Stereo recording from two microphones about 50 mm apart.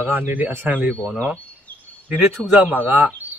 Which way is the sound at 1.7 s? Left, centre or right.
Left.